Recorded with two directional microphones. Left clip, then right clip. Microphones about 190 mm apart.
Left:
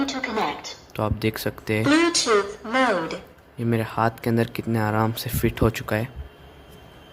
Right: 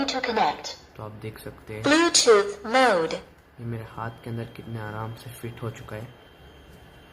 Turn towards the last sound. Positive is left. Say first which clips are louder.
# left 13 dB
turn(degrees=55)  # may be behind; listen again after turning